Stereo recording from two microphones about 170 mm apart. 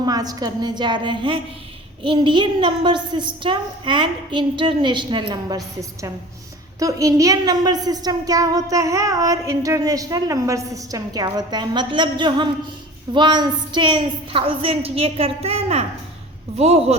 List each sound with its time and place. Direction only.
0.0 s a woman's voice: 20° right (ahead or behind); by 17.0 s 40° right (ahead or behind)